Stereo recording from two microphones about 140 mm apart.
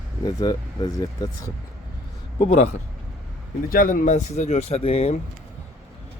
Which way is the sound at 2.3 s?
50° left (ahead or behind).